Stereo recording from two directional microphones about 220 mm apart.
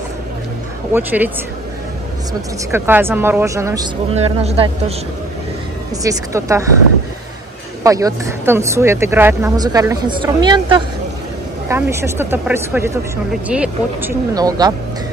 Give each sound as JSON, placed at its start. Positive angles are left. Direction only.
{"t": 0.9, "sound": "speech", "side_deg": -10}
{"t": 2.7, "sound": "speech", "side_deg": -10}
{"t": 4.1, "sound": "speech", "side_deg": -30}
{"t": 6.0, "sound": "speech", "side_deg": -15}
{"t": 7.8, "sound": "speech", "side_deg": -15}
{"t": 14.3, "sound": "speech", "side_deg": -15}